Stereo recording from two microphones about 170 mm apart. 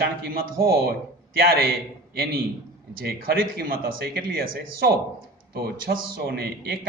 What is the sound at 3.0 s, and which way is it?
A man's voice, 60° right (ahead or behind).